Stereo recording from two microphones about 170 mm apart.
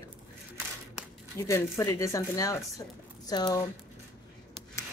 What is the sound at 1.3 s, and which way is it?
A woman's voice, 20° left (ahead or behind).